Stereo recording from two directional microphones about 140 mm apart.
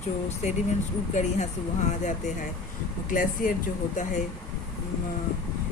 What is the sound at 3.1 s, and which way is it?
Speech, 75° left (ahead or behind).